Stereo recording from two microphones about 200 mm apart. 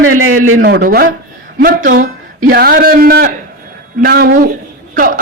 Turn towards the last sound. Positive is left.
turn(degrees=-45)  # may be behind; listen again after turning